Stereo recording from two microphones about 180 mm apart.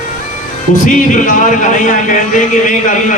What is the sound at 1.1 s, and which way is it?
A man's voice, 45° left (ahead or behind).